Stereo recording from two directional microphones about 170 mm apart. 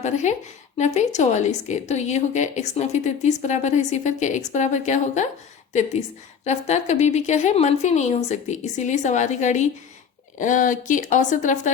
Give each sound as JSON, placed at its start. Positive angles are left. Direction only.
{"t": 0.0, "sound": "a woman's voice", "side_deg": 45}
{"t": 6.4, "sound": "a woman's voice", "side_deg": 40}